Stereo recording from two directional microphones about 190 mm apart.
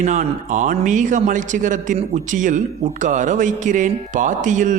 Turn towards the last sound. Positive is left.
turn(degrees=-40)  # may be behind; listen again after turning